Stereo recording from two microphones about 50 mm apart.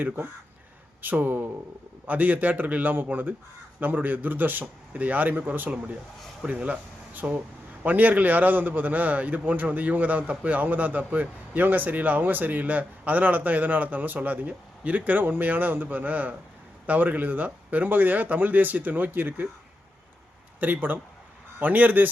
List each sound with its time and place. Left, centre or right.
1.0 s a man's voice: right
20.6 s a man's voice: right